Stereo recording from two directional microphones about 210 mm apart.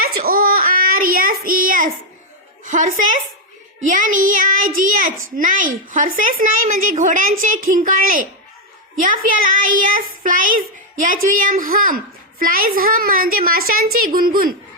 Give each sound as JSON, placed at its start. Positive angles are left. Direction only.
{"t": 0.0, "sound": "child singing", "side_deg": -45}
{"t": 2.6, "sound": "a woman's voice", "side_deg": -40}